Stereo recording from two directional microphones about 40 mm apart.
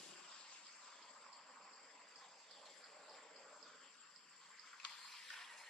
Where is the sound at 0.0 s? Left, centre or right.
Centre.